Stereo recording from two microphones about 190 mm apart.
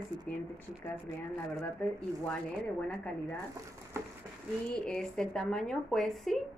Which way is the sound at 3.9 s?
15° right (ahead or behind).